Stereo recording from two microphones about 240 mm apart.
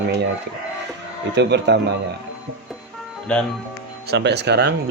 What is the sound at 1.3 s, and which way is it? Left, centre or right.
Speech, right.